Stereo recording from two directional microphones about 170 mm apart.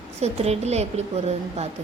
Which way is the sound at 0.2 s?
40° right (ahead or behind).